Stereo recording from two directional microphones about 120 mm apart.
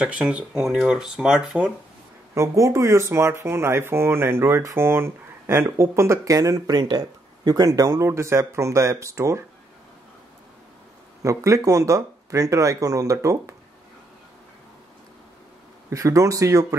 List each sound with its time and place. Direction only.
0.0 s speech: 10° right (ahead or behind)
2.3 s speech: 25° right (ahead or behind)
11.2 s speech: 25° right (ahead or behind)
15.9 s speech: 25° right (ahead or behind)